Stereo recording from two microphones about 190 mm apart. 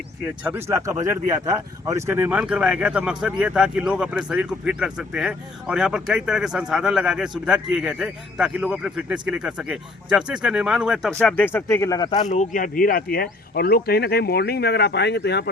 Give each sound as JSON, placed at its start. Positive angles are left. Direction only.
{"t": 0.4, "sound": "speech", "side_deg": -15}
{"t": 12.2, "sound": "speech", "side_deg": 40}